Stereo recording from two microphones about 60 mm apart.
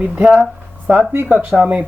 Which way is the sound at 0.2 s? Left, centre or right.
Centre.